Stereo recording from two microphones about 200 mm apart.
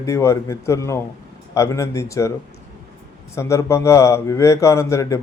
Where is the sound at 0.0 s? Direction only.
15° left (ahead or behind).